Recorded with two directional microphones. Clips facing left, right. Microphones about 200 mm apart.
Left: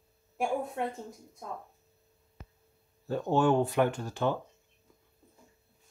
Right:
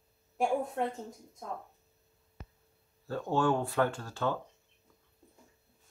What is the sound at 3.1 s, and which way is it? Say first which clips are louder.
Speech: left 3 dB; 20° left (ahead or behind).